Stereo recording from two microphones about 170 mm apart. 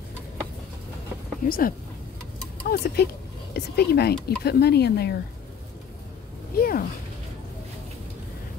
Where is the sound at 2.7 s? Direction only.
75° left (ahead or behind).